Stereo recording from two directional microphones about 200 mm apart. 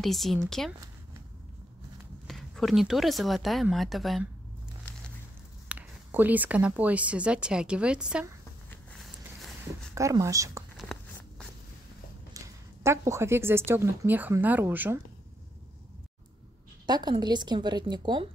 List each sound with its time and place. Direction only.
0.0 s speech: centre (ahead or behind)
2.2 s speech: centre (ahead or behind)
5.7 s speech: 10° right (ahead or behind)
8.6 s walk: centre (ahead or behind)
9.9 s speech: 15° right (ahead or behind)
10.8 s a sound: centre (ahead or behind)
12.4 s speech: 15° right (ahead or behind)
16.8 s a woman's voice: 20° right (ahead or behind)